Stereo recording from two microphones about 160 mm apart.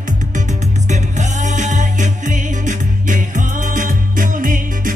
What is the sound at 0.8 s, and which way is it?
Music, 50° right (ahead or behind).